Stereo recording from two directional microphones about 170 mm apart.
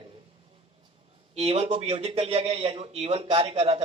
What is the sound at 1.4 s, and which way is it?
A man's voice, 40° right (ahead or behind).